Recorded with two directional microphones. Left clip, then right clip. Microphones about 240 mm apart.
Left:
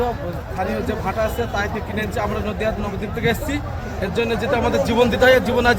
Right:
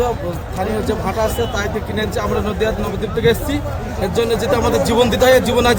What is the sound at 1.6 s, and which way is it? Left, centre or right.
A man's voice, centre.